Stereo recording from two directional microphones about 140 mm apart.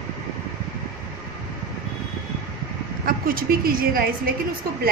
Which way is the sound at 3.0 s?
90° right.